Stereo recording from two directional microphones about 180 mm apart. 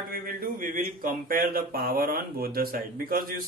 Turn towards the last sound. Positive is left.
turn(degrees=-55)  # may be behind; listen again after turning